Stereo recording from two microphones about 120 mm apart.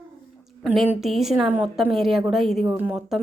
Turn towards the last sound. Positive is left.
turn(degrees=0)  # may be behind; listen again after turning